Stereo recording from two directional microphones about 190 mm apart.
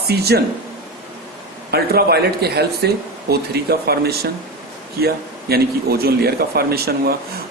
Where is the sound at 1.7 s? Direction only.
55° right (ahead or behind).